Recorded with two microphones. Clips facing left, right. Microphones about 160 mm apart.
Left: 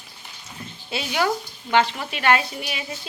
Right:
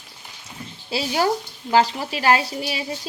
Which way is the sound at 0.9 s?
30° right (ahead or behind).